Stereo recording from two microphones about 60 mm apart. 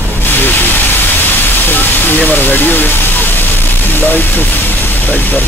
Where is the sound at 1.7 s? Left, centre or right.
Left.